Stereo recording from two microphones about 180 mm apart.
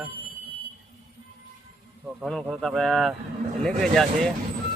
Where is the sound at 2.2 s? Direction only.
Centre (ahead or behind).